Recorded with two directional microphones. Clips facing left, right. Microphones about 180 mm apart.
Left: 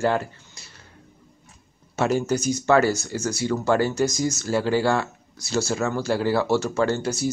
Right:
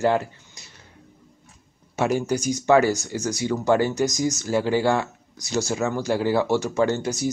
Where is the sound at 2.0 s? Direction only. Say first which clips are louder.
Even; 15° right (ahead or behind).